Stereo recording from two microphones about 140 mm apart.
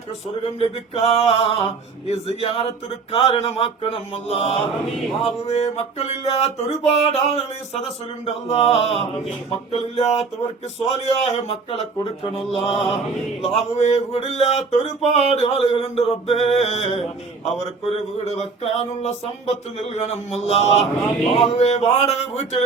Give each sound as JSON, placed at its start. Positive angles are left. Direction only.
{"t": 0.4, "sound": "male singing", "side_deg": 45}